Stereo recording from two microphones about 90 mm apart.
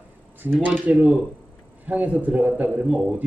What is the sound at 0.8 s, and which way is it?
A man's voice, 15° right (ahead or behind).